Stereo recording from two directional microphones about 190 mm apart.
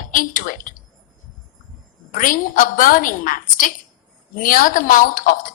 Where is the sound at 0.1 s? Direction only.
45° left (ahead or behind).